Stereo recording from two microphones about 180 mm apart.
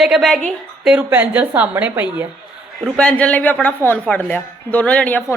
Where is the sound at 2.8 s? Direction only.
5° left (ahead or behind).